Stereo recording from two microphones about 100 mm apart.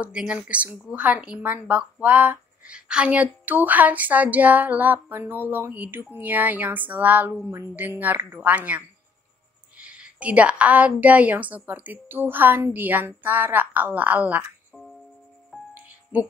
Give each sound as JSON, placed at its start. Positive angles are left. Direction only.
{"t": 0.0, "sound": "speech", "side_deg": -10}
{"t": 15.7, "sound": "music", "side_deg": -15}